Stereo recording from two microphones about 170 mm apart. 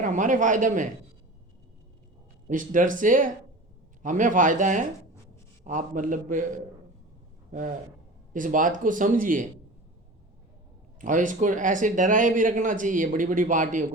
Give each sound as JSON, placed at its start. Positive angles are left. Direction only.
{"t": 0.0, "sound": "speech", "side_deg": -50}
{"t": 2.5, "sound": "speech", "side_deg": -50}
{"t": 8.3, "sound": "speech", "side_deg": -50}
{"t": 11.0, "sound": "speech", "side_deg": -50}